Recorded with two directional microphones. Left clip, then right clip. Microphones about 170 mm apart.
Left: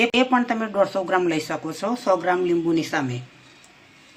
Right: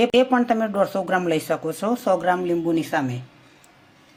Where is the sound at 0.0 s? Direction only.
45° right (ahead or behind).